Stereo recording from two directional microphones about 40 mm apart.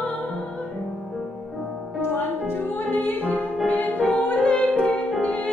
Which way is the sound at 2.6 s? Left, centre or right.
Left.